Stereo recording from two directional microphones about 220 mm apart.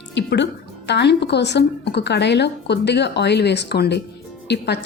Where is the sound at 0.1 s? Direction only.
55° left (ahead or behind).